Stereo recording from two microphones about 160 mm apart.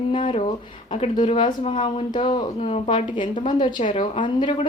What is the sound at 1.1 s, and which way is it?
Speech, 30° left (ahead or behind).